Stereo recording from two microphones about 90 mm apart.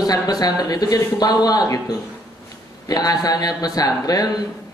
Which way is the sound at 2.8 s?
45° left (ahead or behind).